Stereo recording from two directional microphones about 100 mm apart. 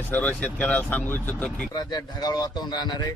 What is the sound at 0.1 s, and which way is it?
Speech, 15° left (ahead or behind).